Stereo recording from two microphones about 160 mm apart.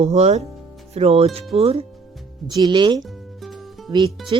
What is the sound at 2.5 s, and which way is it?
Speech, 25° right (ahead or behind).